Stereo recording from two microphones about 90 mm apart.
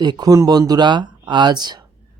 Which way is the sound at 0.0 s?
50° right (ahead or behind).